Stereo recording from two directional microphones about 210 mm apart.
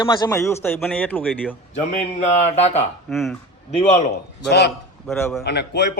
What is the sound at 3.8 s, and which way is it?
Speech, 30° left (ahead or behind).